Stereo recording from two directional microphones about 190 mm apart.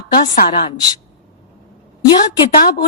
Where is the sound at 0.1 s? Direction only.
50° left (ahead or behind).